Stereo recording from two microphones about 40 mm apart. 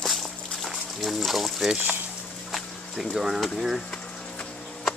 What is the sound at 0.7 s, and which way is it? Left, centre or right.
Speech, centre.